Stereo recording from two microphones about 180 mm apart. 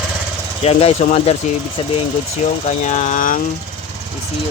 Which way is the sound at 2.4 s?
40° left (ahead or behind).